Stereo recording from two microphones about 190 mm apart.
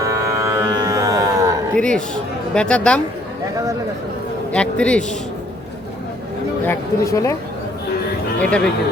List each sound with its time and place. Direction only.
0.0 s music: 15° right (ahead or behind)
1.7 s a man's voice: 5° left (ahead or behind)
4.5 s a man's voice: 5° left (ahead or behind)
6.7 s speech: 15° left (ahead or behind)
8.4 s a man's voice: 5° left (ahead or behind)